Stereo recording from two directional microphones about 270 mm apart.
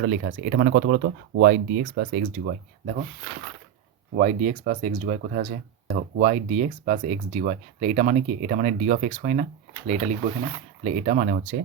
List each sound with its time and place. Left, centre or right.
0.0 s speech: right
4.1 s speech: right